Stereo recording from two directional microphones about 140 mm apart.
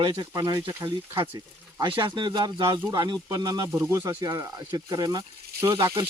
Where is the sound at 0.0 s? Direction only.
30° right (ahead or behind).